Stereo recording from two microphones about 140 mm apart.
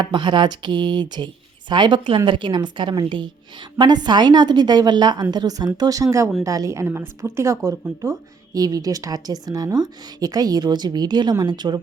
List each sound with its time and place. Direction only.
0.0 s a woman's voice: 35° right (ahead or behind)